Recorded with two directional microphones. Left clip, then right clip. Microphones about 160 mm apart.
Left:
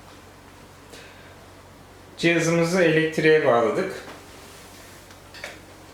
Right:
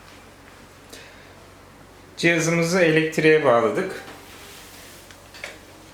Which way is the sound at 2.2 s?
20° right (ahead or behind).